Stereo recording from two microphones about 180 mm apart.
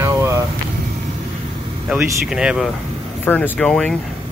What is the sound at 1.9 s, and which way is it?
Speech, 5° right (ahead or behind).